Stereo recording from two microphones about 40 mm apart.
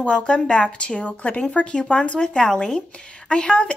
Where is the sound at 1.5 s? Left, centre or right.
Left.